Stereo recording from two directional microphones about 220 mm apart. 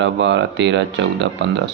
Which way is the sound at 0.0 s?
55° right (ahead or behind).